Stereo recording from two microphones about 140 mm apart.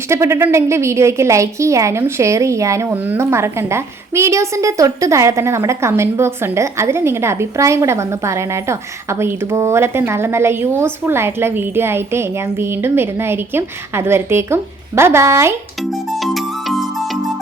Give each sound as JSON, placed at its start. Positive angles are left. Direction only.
{"t": 0.1, "sound": "a woman's voice", "side_deg": -20}
{"t": 15.8, "sound": "music", "side_deg": 0}